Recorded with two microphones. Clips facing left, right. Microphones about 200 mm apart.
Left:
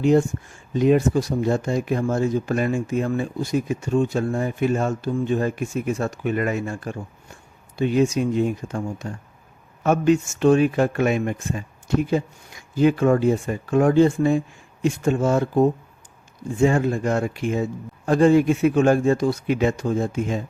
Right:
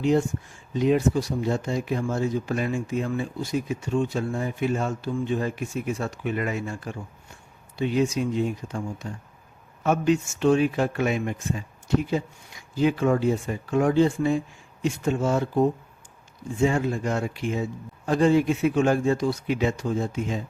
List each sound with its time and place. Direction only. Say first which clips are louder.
0.0 s speech: left 4 dB; 50° left (ahead or behind)
12.7 s speech: left 4 dB; 50° left (ahead or behind)